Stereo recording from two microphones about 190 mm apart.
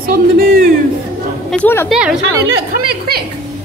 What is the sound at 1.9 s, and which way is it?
Speech, centre (ahead or behind).